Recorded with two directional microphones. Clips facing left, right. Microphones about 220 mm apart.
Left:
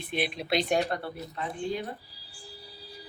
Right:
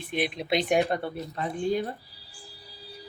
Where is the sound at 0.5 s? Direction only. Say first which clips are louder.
Right 3 dB; 20° right (ahead or behind).